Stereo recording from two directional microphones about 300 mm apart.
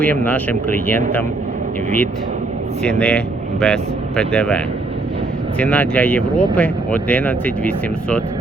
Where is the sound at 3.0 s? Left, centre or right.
Centre.